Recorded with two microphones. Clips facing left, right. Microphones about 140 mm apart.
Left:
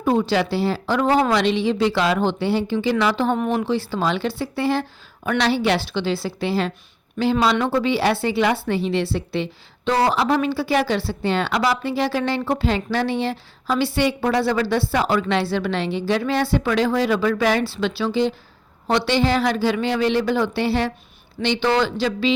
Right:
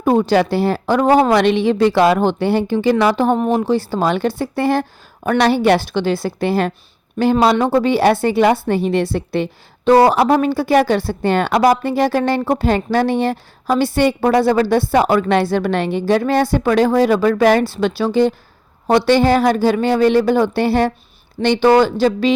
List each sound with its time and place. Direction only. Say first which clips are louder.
0.0 s speech: right 5 dB; 50° right (ahead or behind)